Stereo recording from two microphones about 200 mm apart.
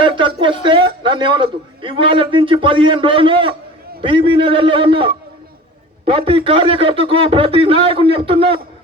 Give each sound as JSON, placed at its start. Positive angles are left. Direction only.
{"t": 0.0, "sound": "a man's voice", "side_deg": -25}